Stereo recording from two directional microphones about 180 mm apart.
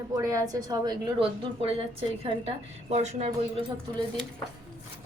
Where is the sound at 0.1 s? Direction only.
20° right (ahead or behind).